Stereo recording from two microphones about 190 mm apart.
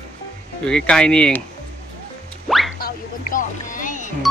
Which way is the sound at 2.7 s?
50° left (ahead or behind).